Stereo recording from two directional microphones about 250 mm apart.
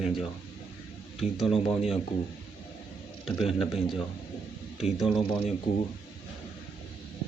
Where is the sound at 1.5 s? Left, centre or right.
Left.